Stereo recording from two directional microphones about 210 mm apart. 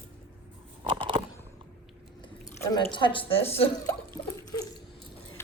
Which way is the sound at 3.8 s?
15° left (ahead or behind).